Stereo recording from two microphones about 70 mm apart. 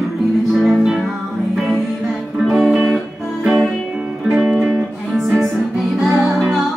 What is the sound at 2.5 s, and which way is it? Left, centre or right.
Music, centre.